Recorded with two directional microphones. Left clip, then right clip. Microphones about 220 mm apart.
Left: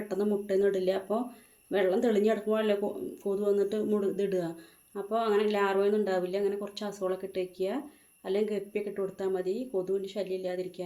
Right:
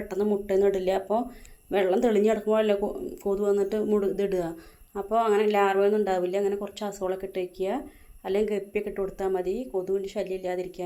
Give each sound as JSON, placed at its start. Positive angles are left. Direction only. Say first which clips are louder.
{"t": 0.1, "sound": "speech", "louder": "right 4 dB", "side_deg": -10}